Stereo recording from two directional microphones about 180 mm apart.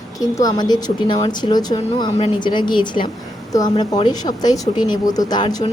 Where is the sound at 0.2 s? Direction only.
20° left (ahead or behind).